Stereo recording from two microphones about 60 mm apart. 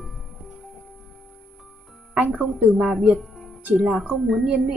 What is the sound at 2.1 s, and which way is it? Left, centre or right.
Speech, right.